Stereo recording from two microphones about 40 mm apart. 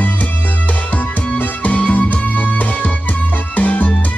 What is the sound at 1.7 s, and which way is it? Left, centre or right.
Music, left.